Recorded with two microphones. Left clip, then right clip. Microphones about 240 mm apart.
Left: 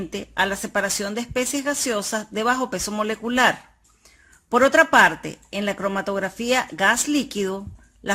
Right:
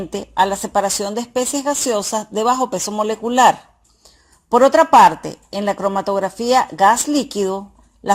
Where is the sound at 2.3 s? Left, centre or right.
Left.